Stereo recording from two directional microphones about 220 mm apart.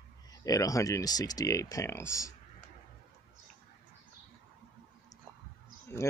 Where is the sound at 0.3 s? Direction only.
15° left (ahead or behind).